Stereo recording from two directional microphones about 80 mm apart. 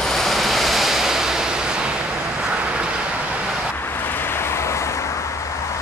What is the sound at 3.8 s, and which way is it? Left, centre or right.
Vehicle, left.